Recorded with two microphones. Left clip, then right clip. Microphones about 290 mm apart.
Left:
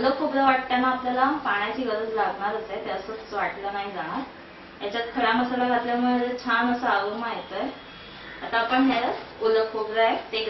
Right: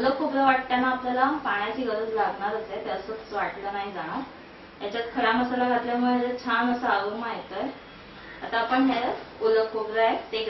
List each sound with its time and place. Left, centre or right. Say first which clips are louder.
0.0 s a woman's voice: left 1 dB; centre
0.7 s a woman's voice: left 1 dB; centre
8.5 s a woman's voice: left 2 dB; centre